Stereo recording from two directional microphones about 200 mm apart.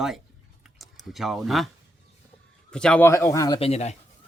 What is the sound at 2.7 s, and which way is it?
Speech, 5° left (ahead or behind).